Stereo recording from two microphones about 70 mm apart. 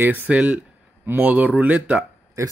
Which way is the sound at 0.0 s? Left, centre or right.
Right.